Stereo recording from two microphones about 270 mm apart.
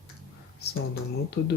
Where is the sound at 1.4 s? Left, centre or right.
Left.